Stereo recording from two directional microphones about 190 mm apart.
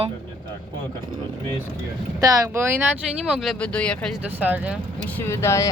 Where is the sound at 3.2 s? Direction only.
Centre (ahead or behind).